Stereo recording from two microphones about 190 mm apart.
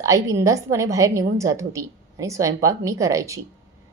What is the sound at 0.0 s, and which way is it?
A woman's voice, 15° right (ahead or behind).